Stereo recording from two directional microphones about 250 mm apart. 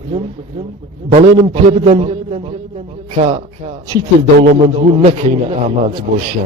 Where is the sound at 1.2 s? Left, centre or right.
Right.